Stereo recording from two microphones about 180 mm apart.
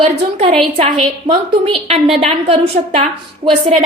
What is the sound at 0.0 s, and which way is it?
A woman's voice, 30° right (ahead or behind).